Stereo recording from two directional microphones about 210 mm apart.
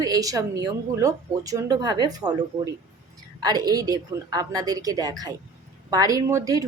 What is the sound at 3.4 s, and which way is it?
Speech, 20° right (ahead or behind).